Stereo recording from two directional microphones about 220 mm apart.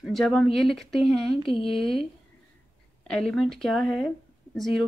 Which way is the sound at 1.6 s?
Centre (ahead or behind).